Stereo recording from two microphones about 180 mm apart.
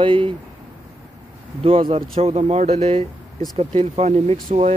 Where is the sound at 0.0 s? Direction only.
30° right (ahead or behind).